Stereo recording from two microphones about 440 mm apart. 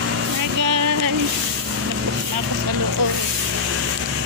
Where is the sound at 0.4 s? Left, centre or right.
Right.